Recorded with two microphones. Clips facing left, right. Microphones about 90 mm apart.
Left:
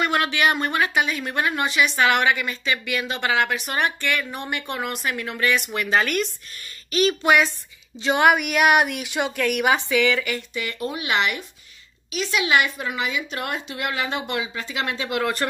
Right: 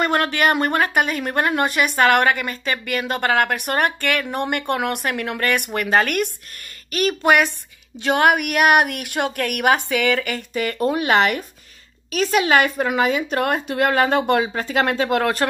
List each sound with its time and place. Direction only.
0.0 s speech: 40° right (ahead or behind)